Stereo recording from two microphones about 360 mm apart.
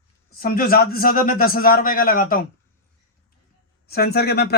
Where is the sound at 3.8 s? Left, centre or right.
Left.